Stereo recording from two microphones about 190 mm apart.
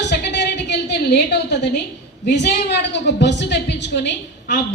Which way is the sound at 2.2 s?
60° left (ahead or behind).